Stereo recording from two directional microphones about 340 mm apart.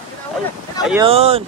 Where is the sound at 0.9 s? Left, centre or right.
Centre.